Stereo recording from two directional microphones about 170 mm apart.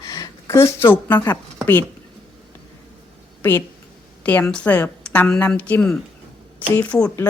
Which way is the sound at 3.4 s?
10° left (ahead or behind).